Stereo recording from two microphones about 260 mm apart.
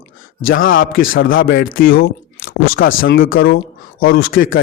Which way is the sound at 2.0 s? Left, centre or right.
Left.